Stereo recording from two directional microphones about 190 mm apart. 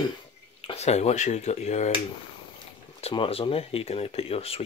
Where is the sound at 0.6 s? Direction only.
35° left (ahead or behind).